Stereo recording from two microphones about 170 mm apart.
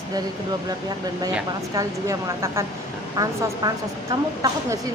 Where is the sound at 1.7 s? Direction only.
20° right (ahead or behind).